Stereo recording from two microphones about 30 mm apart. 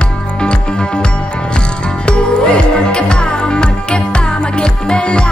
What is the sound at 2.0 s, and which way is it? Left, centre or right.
Music, left.